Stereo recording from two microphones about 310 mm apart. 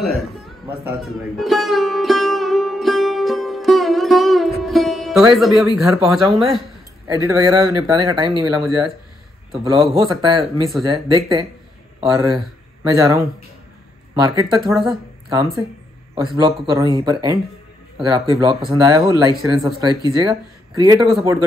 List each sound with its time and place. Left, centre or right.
0.8 s music: centre
5.9 s speech: centre
14.2 s speech: centre